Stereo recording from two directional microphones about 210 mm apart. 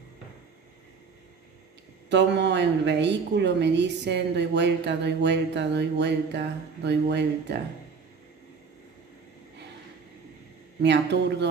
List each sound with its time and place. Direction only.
2.0 s a woman's voice: 55° right (ahead or behind)
10.8 s a woman's voice: 55° right (ahead or behind)